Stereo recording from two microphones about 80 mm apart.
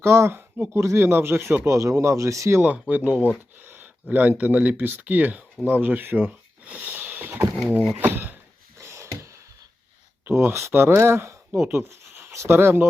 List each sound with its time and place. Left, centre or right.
0.0 s speech: right
2.6 s speech: centre
8.8 s a sound: right
10.2 s speech: right